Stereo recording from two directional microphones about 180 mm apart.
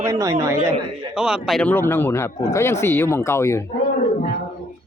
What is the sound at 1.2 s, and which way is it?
Speech, centre (ahead or behind).